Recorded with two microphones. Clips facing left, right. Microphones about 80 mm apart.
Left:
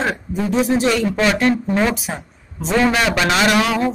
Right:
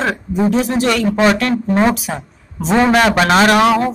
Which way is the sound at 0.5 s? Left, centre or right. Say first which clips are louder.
Left 4 dB; centre.